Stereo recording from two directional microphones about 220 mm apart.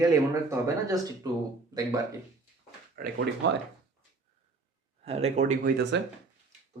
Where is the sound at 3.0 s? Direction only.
40° right (ahead or behind).